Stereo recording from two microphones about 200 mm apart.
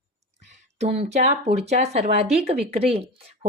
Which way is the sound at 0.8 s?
35° right (ahead or behind).